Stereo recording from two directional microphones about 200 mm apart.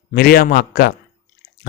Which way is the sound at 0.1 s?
45° left (ahead or behind).